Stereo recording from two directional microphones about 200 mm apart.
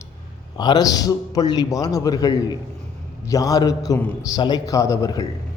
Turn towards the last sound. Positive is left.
turn(degrees=15)  # may be behind; listen again after turning